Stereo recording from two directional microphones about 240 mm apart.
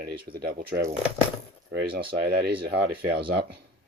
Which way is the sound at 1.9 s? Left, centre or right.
Right.